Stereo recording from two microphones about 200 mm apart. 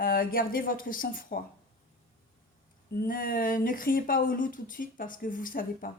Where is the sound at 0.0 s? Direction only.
45° left (ahead or behind).